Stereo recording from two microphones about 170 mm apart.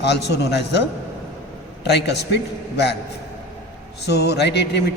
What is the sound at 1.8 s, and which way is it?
Speech, 80° left.